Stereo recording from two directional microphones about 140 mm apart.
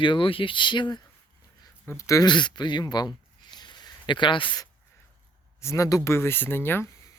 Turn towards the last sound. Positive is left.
turn(degrees=20)  # may be behind; listen again after turning